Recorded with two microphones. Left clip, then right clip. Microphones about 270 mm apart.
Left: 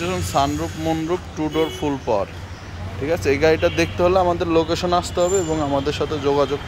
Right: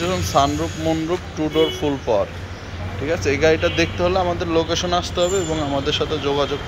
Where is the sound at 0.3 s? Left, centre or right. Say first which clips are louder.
Right 2 dB; centre.